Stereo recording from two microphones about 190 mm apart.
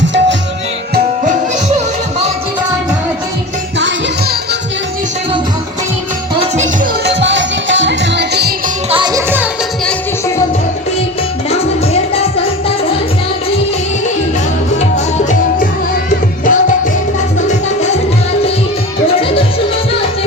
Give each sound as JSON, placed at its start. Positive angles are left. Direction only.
{"t": 0.0, "sound": "music", "side_deg": -70}
{"t": 3.8, "sound": "music", "side_deg": -70}
{"t": 7.0, "sound": "music", "side_deg": -65}
{"t": 8.9, "sound": "music", "side_deg": -25}
{"t": 14.8, "sound": "music", "side_deg": 40}